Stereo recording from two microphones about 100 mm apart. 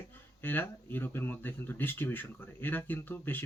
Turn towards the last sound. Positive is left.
turn(degrees=20)  # may be behind; listen again after turning